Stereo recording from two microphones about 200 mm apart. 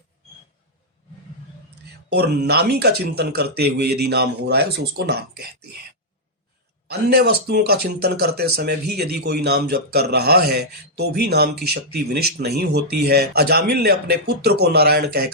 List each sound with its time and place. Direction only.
2.1 s speech: 55° right (ahead or behind)
6.8 s speech: 55° right (ahead or behind)